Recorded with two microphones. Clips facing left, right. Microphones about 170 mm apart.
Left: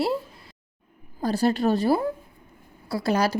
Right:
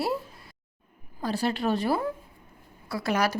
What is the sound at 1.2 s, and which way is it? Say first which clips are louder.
A woman's voice: left 5 dB; 40° left (ahead or behind).